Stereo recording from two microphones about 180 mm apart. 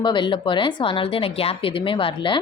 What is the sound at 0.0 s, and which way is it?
A woman's voice, 25° left (ahead or behind).